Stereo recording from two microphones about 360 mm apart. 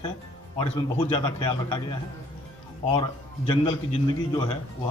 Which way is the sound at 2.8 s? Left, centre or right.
Centre.